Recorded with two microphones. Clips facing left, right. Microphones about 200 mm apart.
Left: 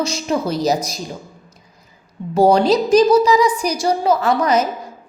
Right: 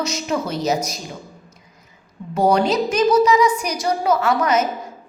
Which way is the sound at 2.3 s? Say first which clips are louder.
Left 4 dB; 30° left (ahead or behind).